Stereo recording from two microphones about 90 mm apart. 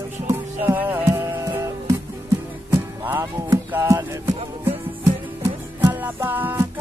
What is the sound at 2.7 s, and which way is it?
Music, 20° right (ahead or behind).